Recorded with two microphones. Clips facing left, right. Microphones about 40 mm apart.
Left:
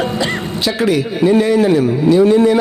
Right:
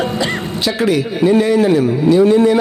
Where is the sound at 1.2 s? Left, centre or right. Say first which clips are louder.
Even; centre.